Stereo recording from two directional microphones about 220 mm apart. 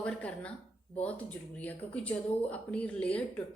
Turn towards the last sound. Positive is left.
turn(degrees=5)  # may be behind; listen again after turning